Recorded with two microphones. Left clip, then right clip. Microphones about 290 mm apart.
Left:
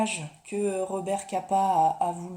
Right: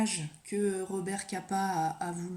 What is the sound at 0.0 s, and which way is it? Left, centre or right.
Speech, centre.